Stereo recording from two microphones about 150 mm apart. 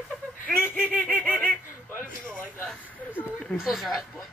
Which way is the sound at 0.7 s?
10° right (ahead or behind).